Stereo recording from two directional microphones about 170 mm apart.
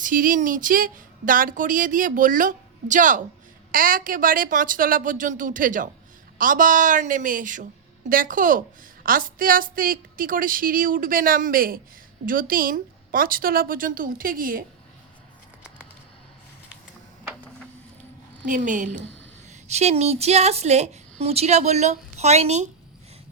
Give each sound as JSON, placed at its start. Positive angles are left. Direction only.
{"t": 0.0, "sound": "a woman's voice", "side_deg": -55}
{"t": 18.4, "sound": "a woman's voice", "side_deg": -50}